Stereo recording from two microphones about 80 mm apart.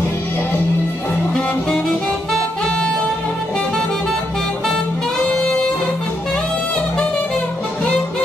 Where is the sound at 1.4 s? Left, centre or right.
Centre.